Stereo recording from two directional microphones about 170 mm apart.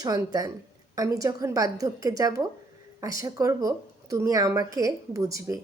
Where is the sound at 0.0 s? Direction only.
20° right (ahead or behind).